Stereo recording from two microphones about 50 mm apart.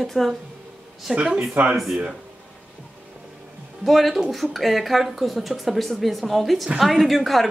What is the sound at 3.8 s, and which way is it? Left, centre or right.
Speech, centre.